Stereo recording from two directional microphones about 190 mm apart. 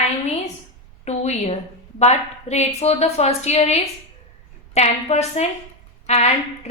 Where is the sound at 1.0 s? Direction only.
35° left (ahead or behind).